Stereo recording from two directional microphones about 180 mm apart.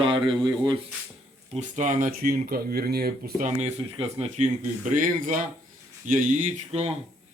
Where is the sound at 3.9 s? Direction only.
35° right (ahead or behind).